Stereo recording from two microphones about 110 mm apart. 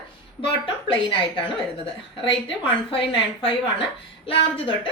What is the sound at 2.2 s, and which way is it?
A woman's voice, 50° left (ahead or behind).